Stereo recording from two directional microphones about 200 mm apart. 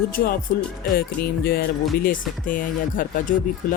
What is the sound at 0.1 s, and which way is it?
Speech, 45° left (ahead or behind).